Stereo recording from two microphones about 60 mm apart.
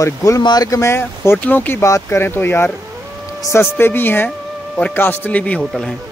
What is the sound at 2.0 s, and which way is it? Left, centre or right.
A man's voice, left.